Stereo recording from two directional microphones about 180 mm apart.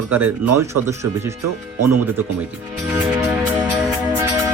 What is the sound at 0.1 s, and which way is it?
Speech, 10° right (ahead or behind).